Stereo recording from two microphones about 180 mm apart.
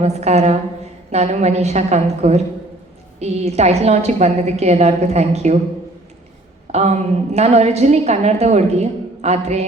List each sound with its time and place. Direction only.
0.0 s a woman's voice: 35° right (ahead or behind)
6.7 s a woman's voice: 40° right (ahead or behind)